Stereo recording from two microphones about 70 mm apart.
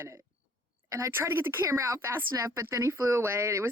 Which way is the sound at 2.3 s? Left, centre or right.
Right.